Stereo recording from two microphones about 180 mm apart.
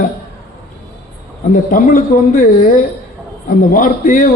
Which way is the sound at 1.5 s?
50° left (ahead or behind).